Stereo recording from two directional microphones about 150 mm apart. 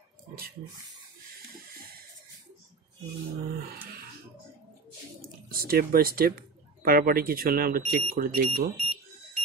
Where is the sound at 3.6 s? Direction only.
80° right.